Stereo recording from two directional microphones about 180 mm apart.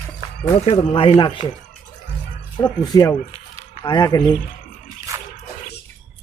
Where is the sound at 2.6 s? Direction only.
20° left (ahead or behind).